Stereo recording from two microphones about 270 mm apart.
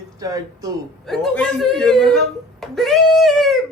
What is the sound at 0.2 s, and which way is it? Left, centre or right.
Speech, centre.